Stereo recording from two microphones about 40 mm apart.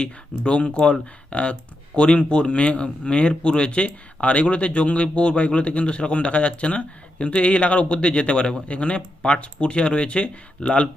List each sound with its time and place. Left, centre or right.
0.0 s a man's voice: left